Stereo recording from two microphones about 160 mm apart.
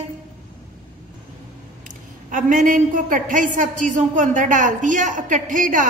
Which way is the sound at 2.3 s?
55° right (ahead or behind).